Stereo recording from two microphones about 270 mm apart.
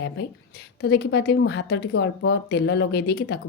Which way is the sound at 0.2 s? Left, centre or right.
Left.